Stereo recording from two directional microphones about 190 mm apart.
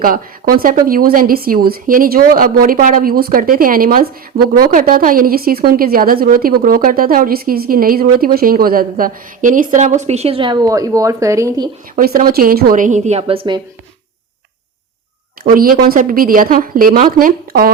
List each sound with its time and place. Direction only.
0.0 s a woman's voice: 50° right (ahead or behind); by 11.7 s 20° right (ahead or behind)
11.9 s a woman's voice: 50° right (ahead or behind); by 13.6 s 30° right (ahead or behind)
15.4 s a woman's voice: 50° right (ahead or behind)